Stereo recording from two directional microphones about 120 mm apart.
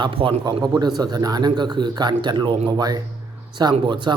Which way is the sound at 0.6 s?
35° right (ahead or behind).